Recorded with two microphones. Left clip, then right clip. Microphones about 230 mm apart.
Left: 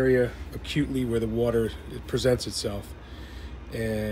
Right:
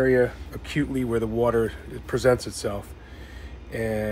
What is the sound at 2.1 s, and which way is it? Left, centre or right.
Speech, centre.